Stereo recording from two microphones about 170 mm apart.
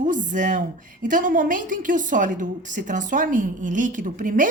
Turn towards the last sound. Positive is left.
turn(degrees=-50)  # may be behind; listen again after turning